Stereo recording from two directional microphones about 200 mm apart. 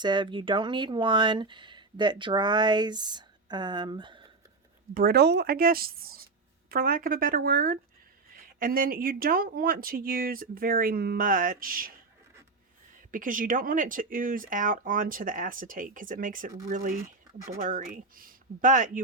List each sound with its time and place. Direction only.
0.0 s speech: 20° right (ahead or behind)
4.9 s speech: 50° right (ahead or behind)
13.1 s speech: 45° right (ahead or behind)